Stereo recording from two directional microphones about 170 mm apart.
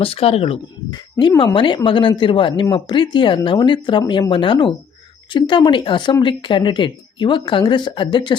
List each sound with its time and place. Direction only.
0.0 s speech: 35° left (ahead or behind)
0.9 s speech: 20° left (ahead or behind)